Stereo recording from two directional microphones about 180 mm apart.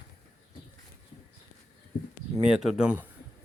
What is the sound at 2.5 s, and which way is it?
Speech, centre (ahead or behind).